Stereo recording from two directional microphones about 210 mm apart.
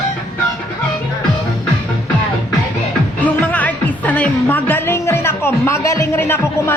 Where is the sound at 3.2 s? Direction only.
5° left (ahead or behind).